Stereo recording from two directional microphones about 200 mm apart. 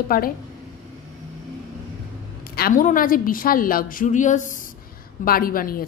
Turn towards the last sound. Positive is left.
turn(degrees=45)  # may be behind; listen again after turning